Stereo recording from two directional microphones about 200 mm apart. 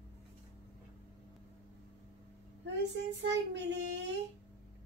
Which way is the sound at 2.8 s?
60° right (ahead or behind).